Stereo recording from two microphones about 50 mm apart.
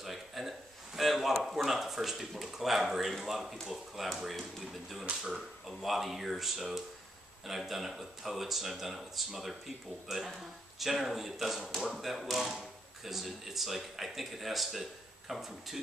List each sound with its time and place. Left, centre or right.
0.0 s speech: centre
5.0 s speech: centre
5.7 s speech: centre